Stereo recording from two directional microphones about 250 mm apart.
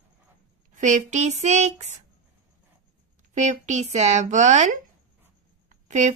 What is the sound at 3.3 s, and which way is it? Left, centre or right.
Speech, right.